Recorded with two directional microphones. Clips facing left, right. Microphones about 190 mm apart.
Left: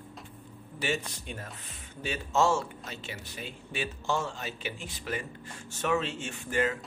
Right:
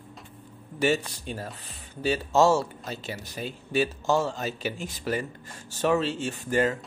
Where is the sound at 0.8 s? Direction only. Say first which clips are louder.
Right 8 dB; 35° right (ahead or behind).